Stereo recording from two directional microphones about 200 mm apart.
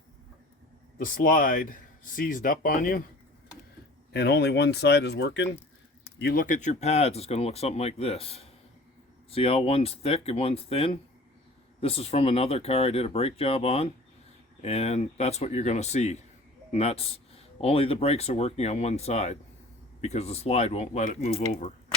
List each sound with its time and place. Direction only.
0.9 s speech: 45° left (ahead or behind)
4.1 s speech: 55° left (ahead or behind); by 21.4 s 30° left (ahead or behind)